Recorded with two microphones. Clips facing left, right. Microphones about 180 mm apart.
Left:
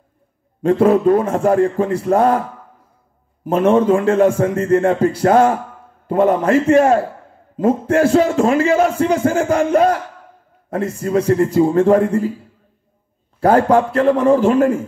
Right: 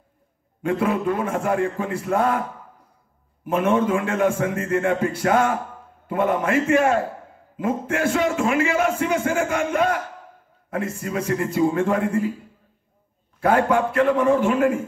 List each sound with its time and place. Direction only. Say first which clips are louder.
0.6 s a man's voice: left 9 dB; 35° left (ahead or behind)
3.4 s a man's voice: left 7 dB; 35° left (ahead or behind)
13.4 s a man's voice: left 6 dB; 35° left (ahead or behind)